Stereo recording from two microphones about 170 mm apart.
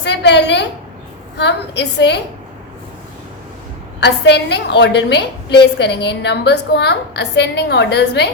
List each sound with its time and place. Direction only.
0.0 s a woman's voice: 90° left
4.0 s a woman's voice: 90° left